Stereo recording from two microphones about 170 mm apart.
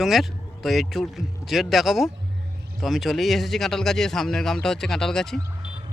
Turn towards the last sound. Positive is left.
turn(degrees=5)  # may be behind; listen again after turning